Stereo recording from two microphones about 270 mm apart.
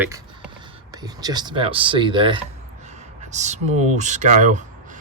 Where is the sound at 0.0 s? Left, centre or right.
Centre.